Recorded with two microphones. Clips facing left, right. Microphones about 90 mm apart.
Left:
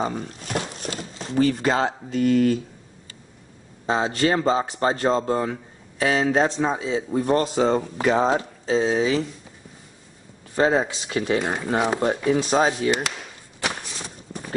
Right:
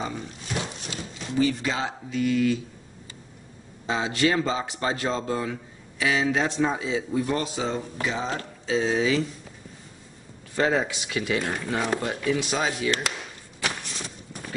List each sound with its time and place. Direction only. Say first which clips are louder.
0.0 s a sound: left 6 dB; 50° left (ahead or behind)
1.3 s speech: left 4 dB; 50° left (ahead or behind)
3.8 s speech: left 3 dB; 35° left (ahead or behind); by 8.3 s 50° left (ahead or behind)
8.6 s speech: left 2 dB; 30° left (ahead or behind)
10.5 s speech: left 4 dB; 25° left (ahead or behind)
11.4 s speech: left 5 dB; 20° left (ahead or behind)
12.0 s speech: left 5 dB; 35° left (ahead or behind)
13.6 s a sound: left 2 dB; 5° left (ahead or behind)